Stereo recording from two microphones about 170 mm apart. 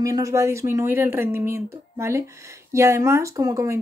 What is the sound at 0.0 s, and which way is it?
Speech, 20° right (ahead or behind).